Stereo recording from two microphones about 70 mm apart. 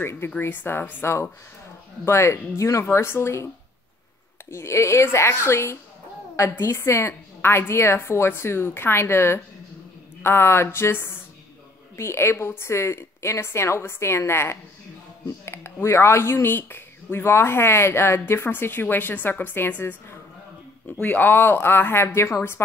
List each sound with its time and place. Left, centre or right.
0.0 s speech: left
4.5 s speech: left